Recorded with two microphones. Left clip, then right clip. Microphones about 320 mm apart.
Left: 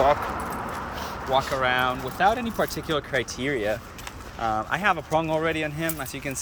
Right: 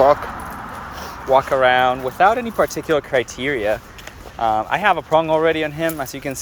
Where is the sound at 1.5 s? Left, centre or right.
Centre.